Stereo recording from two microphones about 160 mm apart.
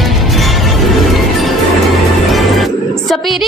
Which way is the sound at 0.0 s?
Centre (ahead or behind).